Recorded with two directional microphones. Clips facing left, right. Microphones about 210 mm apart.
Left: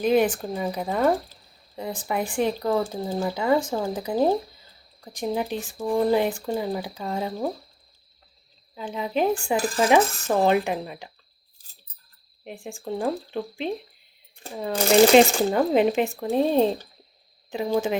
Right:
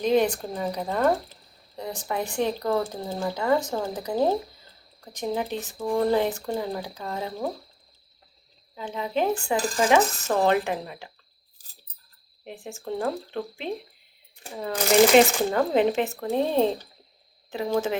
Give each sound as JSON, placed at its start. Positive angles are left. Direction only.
{"t": 0.0, "sound": "speech", "side_deg": 10}
{"t": 8.7, "sound": "speech", "side_deg": 10}
{"t": 12.5, "sound": "speech", "side_deg": 15}